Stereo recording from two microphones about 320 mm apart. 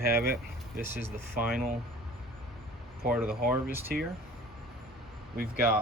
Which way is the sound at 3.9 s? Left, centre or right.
Right.